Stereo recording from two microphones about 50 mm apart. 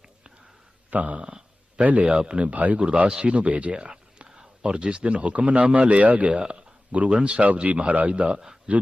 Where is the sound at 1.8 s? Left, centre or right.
Right.